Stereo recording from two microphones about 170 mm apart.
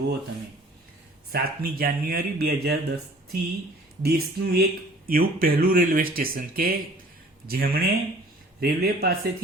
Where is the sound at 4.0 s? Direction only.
65° right (ahead or behind).